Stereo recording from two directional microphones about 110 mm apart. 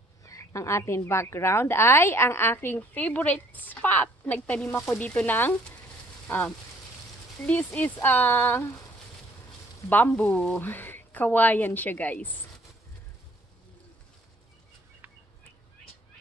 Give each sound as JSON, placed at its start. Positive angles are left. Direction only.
{"t": 0.2, "sound": "a woman's voice", "side_deg": 30}
{"t": 9.8, "sound": "speech", "side_deg": 15}